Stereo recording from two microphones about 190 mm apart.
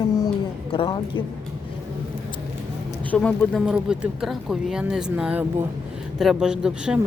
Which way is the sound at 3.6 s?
5° right (ahead or behind).